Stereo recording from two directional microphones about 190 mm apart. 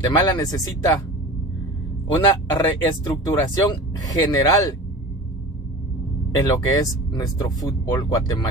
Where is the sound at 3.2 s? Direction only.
20° left (ahead or behind).